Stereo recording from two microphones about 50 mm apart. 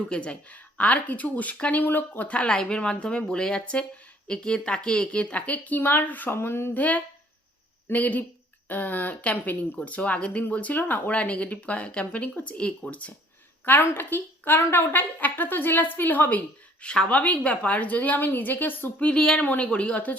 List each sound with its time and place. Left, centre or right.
0.1 s speech: left
6.3 s speech: left
6.7 s speech: left
13.7 s speech: left
14.6 s speech: left
15.2 s speech: left
16.8 s speech: centre; by 18.9 s left
18.9 s speech: left